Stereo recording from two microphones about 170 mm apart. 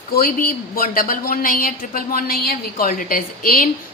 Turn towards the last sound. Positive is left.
turn(degrees=55)  # may be behind; listen again after turning